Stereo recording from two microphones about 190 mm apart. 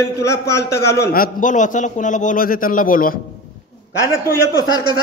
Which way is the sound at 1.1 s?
45° left (ahead or behind).